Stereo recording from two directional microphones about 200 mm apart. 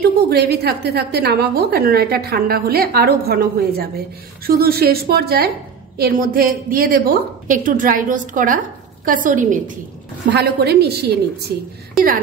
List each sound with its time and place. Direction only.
0.0 s a woman's voice: 50° right (ahead or behind)
10.3 s a woman's voice: 55° right (ahead or behind)